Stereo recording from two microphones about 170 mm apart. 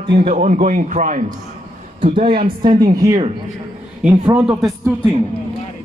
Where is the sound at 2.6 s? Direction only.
25° right (ahead or behind).